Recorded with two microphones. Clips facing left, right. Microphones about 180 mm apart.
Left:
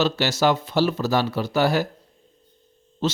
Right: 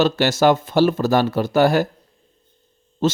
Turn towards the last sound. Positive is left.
turn(degrees=-45)  # may be behind; listen again after turning